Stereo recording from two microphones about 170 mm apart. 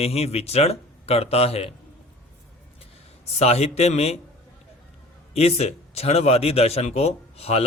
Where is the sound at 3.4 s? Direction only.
40° left (ahead or behind).